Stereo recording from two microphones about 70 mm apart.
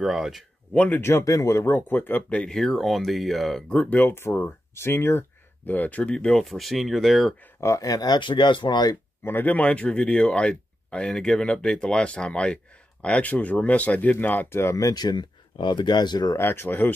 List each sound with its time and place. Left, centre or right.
0.0 s speech: centre
0.7 s speech: left
1.2 s speech: left
1.7 s speech: left
2.5 s speech: centre
3.6 s speech: centre
3.9 s speech: left
5.7 s speech: left
6.4 s speech: centre
7.6 s speech: left
9.2 s speech: left
14.6 s speech: left
14.9 s speech: left
16.3 s speech: left